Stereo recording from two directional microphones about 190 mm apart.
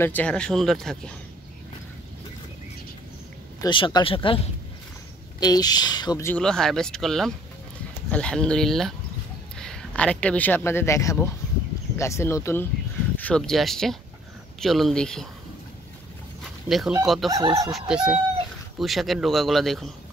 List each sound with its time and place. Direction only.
0.0 s speech: 10° left (ahead or behind)
3.6 s speech: 25° left (ahead or behind)
5.4 s speech: 20° left (ahead or behind)
13.2 s speech: 5° left (ahead or behind)
16.6 s speech: centre (ahead or behind)
17.3 s speech: 20° right (ahead or behind)
17.6 s speech: centre (ahead or behind)